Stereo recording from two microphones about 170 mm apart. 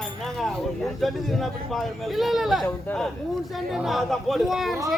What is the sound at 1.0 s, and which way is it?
Speech, centre (ahead or behind).